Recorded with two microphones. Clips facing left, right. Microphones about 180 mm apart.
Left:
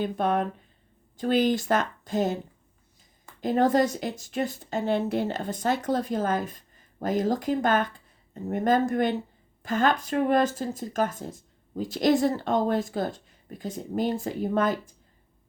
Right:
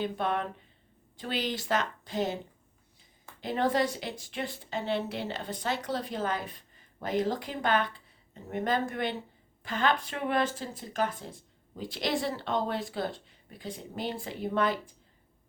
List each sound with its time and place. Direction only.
0.0 s a woman's voice: 45° left (ahead or behind)
3.4 s a woman's voice: 45° left (ahead or behind)